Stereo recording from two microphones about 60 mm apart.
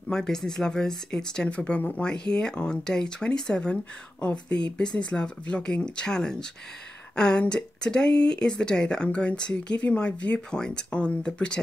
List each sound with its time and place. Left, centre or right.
0.1 s speech: centre
1.6 s speech: left